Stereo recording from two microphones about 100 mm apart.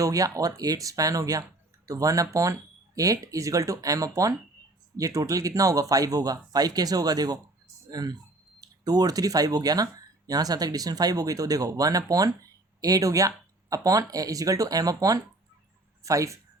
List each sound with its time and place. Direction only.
0.0 s speech: 35° right (ahead or behind)